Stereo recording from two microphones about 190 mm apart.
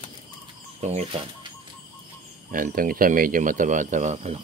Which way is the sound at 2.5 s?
45° right (ahead or behind).